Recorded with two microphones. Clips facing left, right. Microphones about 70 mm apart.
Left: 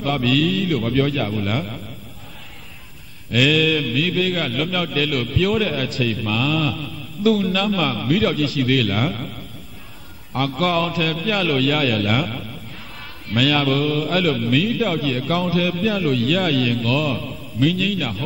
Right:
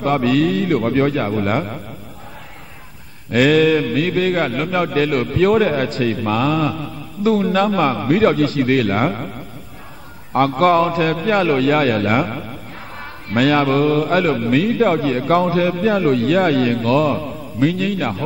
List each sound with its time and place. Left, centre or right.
0.0 s a man's voice: right
3.3 s a man's voice: right
10.3 s a man's voice: right